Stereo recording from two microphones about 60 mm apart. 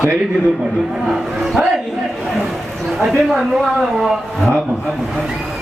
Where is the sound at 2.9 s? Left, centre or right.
Centre.